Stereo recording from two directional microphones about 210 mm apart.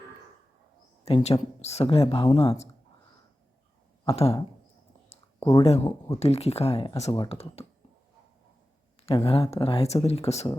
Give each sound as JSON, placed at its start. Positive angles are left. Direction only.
{"t": 1.0, "sound": "speech", "side_deg": 30}
{"t": 4.0, "sound": "speech", "side_deg": 25}
{"t": 5.4, "sound": "speech", "side_deg": 15}
{"t": 5.6, "sound": "speech", "side_deg": 30}
{"t": 9.0, "sound": "speech", "side_deg": 25}